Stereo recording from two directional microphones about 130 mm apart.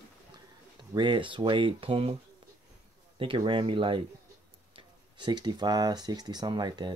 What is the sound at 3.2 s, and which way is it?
Speech, 40° right (ahead or behind).